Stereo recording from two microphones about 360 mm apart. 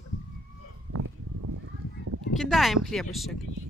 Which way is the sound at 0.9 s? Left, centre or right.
Right.